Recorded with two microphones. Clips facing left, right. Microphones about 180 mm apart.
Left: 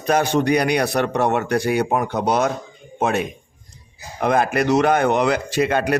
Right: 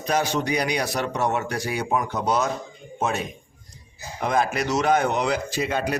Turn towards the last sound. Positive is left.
turn(degrees=65)  # may be behind; listen again after turning